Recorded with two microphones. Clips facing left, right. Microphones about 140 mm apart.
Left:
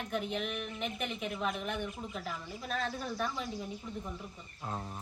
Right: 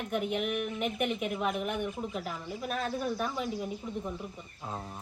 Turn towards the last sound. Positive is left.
turn(degrees=-5)  # may be behind; listen again after turning